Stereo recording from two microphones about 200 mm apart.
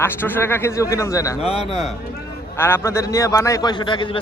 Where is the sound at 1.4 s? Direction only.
30° left (ahead or behind).